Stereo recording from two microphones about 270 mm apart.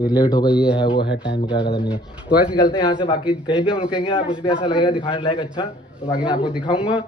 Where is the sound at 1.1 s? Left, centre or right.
Left.